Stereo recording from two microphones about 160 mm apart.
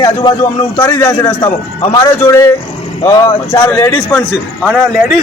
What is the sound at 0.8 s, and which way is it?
A man's voice, 15° left (ahead or behind).